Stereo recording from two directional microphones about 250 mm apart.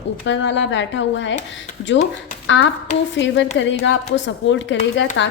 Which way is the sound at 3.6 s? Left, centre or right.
Left.